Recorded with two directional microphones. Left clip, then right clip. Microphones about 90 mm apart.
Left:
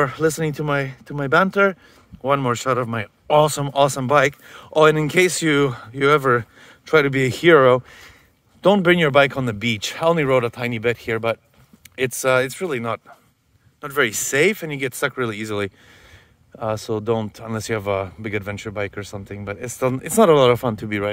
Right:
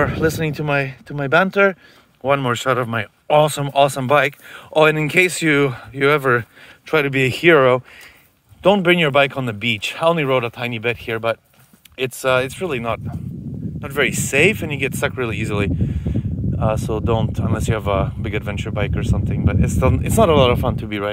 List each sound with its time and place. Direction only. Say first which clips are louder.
0.0 s speech: right 1 dB; 5° left (ahead or behind)
3.3 s speech: right 1 dB; 20° left (ahead or behind)
3.7 s speech: right 2 dB; centre (ahead or behind)
4.8 s speech: left 1 dB; 15° left (ahead or behind)
8.6 s speech: right 1 dB; 35° left (ahead or behind)
12.0 s speech: even; 40° left (ahead or behind)
12.4 s speech: even; 20° left (ahead or behind)